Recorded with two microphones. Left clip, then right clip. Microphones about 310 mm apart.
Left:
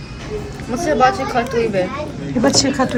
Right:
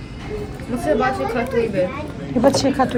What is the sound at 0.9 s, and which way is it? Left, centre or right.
Speech, centre.